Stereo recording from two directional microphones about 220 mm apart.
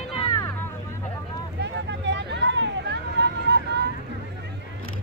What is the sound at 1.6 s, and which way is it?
Hubbub, 50° right (ahead or behind).